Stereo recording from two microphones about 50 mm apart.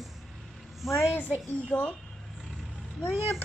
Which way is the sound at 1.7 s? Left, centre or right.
Left.